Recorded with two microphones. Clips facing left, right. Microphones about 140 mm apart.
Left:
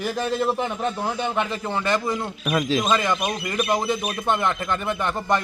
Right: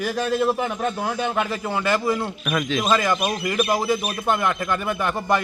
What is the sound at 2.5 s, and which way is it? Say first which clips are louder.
Speech: left 2 dB; 35° left (ahead or behind).